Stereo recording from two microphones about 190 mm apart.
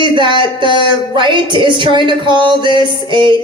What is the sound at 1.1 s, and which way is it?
Speech, 25° right (ahead or behind).